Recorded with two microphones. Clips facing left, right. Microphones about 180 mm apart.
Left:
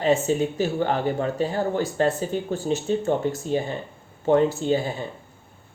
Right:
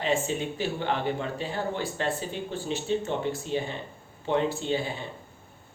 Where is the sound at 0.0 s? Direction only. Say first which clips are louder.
Left 7 dB; 40° left (ahead or behind).